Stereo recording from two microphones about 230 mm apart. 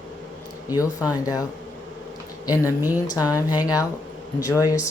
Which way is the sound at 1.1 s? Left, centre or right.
Centre.